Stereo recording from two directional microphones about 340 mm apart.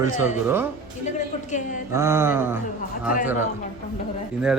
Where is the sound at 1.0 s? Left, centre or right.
Left.